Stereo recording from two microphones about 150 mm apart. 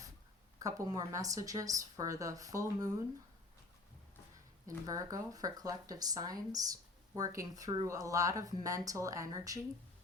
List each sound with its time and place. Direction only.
0.6 s speech: 25° right (ahead or behind)
4.9 s speech: 25° right (ahead or behind)